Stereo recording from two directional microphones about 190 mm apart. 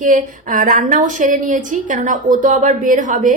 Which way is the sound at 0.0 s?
45° right (ahead or behind).